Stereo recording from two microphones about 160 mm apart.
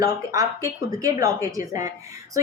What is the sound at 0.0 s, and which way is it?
A woman's voice, 20° right (ahead or behind).